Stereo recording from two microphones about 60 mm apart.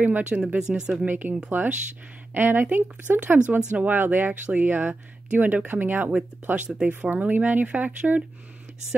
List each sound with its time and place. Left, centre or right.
0.0 s speech: right
0.6 s speech: centre
1.0 s speech: right